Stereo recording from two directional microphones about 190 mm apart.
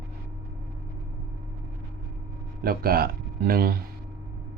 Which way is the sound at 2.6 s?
50° right (ahead or behind).